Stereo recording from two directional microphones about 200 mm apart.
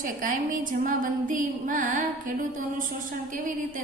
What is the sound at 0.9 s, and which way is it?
A woman's voice, 40° right (ahead or behind).